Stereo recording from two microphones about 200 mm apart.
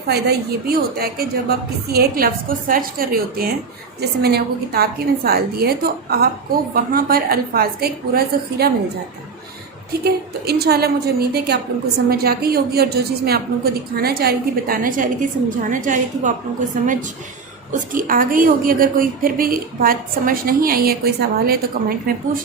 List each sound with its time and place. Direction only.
0.1 s a woman's voice: 50° right (ahead or behind)
10.0 s a woman's voice: 50° right (ahead or behind)